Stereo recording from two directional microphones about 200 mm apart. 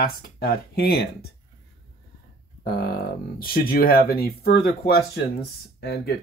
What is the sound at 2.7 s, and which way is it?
Speech, 45° left (ahead or behind).